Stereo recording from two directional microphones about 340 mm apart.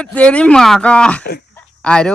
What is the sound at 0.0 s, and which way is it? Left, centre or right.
Speech, centre.